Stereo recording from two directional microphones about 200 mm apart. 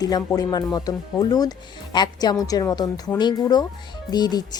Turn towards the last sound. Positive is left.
turn(degrees=20)  # may be behind; listen again after turning